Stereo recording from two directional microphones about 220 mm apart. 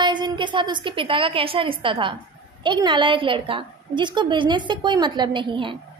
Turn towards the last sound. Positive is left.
turn(degrees=-20)  # may be behind; listen again after turning